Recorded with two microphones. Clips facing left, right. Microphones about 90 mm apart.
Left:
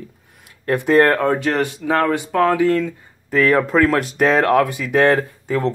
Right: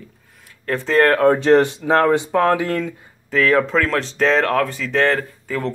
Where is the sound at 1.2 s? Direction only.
20° right (ahead or behind).